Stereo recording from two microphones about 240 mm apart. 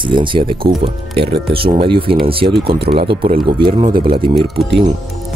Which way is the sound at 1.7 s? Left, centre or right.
Right.